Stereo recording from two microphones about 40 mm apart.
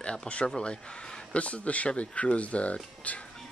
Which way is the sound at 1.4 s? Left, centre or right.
Left.